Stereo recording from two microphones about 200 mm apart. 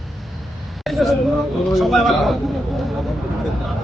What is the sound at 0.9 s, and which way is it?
A man's voice, centre (ahead or behind).